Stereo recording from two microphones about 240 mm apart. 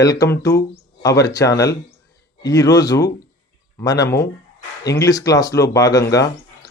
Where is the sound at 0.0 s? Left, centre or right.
Centre.